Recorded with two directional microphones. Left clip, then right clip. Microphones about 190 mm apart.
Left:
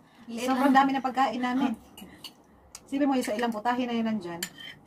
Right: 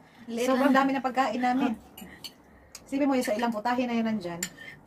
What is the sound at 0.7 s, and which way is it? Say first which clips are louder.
Speech: left 2 dB; 5° right (ahead or behind).